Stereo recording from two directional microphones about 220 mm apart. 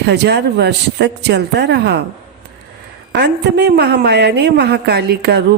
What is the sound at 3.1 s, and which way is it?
Speech, 50° right (ahead or behind).